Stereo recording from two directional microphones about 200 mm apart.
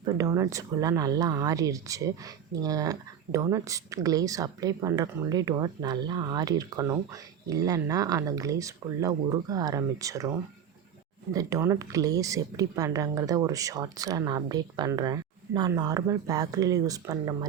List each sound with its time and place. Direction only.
0.0 s speech: 20° right (ahead or behind)
11.3 s speech: 15° right (ahead or behind)